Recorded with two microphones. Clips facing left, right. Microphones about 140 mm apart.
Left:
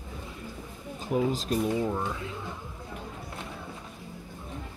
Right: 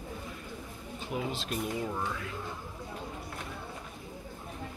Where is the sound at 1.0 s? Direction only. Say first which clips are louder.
Left 8 dB; 40° left (ahead or behind).